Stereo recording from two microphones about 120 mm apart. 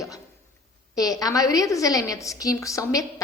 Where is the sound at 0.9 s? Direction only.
30° left (ahead or behind).